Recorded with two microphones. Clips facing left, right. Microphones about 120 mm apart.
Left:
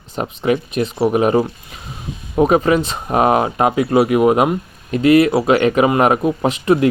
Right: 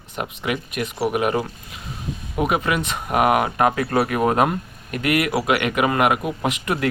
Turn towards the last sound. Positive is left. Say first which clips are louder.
# left 8 dB
turn(degrees=25)  # may be behind; listen again after turning